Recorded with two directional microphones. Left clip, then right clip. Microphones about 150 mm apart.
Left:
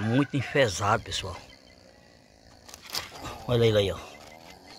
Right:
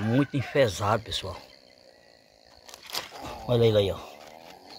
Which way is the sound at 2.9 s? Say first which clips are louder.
Even; centre (ahead or behind).